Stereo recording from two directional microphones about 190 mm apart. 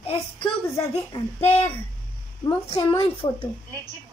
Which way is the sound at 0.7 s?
15° left (ahead or behind).